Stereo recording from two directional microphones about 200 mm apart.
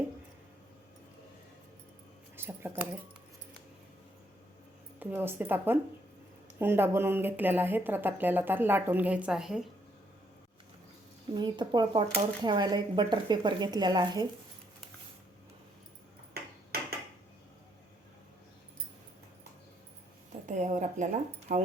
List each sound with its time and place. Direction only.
2.3 s speech: 10° right (ahead or behind)
4.9 s speech: 10° right (ahead or behind)
11.3 s speech: 20° right (ahead or behind)
20.5 s a sound: 35° right (ahead or behind)
21.5 s speech: 45° right (ahead or behind)